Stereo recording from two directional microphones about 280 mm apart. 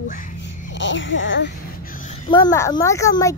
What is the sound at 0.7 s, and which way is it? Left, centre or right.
Speech, left.